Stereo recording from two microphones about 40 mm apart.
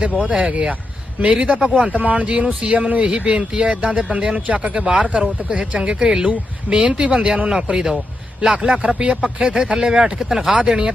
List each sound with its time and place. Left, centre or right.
0.2 s speech: right
1.8 s speech: right
4.4 s speech: right
4.7 s speech: right
8.4 s speech: right